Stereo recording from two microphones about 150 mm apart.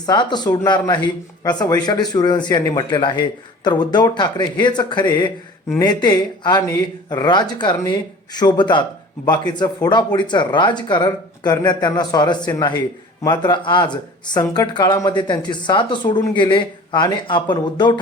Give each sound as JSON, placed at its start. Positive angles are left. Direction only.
{"t": 0.0, "sound": "speech", "side_deg": 30}